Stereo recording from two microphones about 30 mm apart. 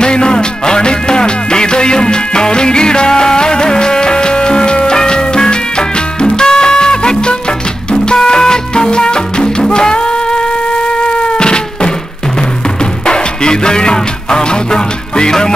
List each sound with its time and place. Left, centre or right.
0.0 s music: left
13.0 s music: left